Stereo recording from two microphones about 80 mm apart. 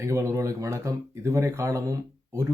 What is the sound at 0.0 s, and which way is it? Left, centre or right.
Speech, right.